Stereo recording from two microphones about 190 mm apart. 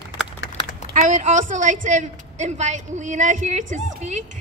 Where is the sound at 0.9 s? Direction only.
40° right (ahead or behind).